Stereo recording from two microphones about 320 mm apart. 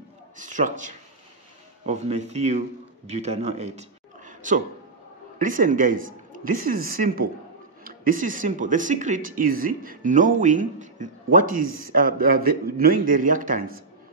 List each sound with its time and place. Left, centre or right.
0.4 s a man's voice: right